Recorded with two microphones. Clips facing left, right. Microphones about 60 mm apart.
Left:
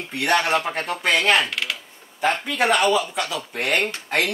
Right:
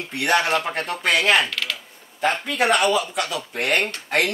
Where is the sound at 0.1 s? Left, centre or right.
Centre.